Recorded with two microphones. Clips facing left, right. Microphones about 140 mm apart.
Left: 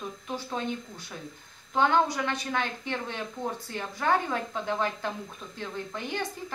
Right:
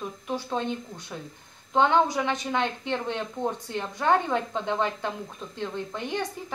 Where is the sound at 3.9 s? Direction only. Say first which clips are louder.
Right 3 dB; 5° left (ahead or behind).